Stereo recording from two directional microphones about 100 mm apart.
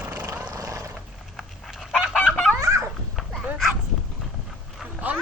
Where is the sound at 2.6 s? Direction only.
30° right (ahead or behind).